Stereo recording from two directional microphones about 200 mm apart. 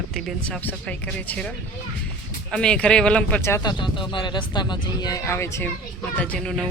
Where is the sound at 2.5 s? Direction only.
5° left (ahead or behind).